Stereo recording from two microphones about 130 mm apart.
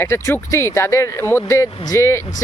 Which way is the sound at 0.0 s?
20° left (ahead or behind).